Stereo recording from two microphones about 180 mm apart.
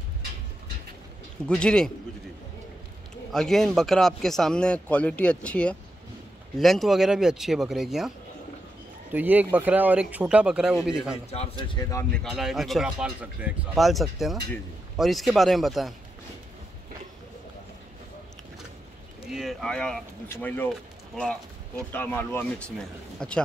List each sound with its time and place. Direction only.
1.5 s speech: 5° left (ahead or behind)
3.3 s speech: centre (ahead or behind)
9.1 s speech: 10° right (ahead or behind)
11.2 s a man's voice: 35° left (ahead or behind)
12.0 s speech: 5° left (ahead or behind)
19.3 s speech: centre (ahead or behind)
21.9 s speech: 10° left (ahead or behind)